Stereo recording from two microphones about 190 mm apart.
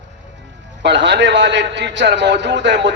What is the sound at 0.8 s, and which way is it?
A man's voice, 65° right (ahead or behind).